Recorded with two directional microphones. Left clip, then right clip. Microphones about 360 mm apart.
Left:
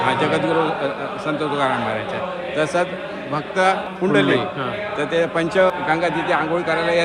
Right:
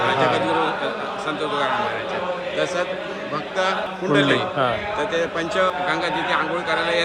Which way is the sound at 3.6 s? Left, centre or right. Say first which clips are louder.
Left 5 dB; centre.